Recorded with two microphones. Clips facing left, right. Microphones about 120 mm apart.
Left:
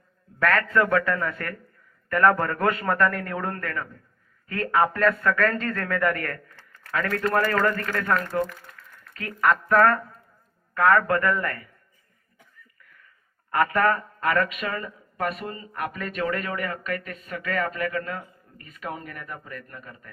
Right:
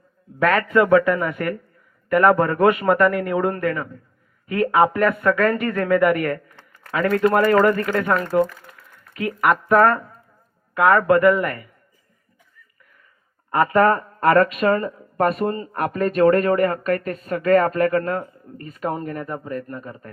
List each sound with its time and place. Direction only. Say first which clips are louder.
0.3 s speech: right 5 dB; 15° right (ahead or behind)
13.5 s a man's voice: right 5 dB; 25° right (ahead or behind)
13.9 s speech: right 8 dB; 40° right (ahead or behind)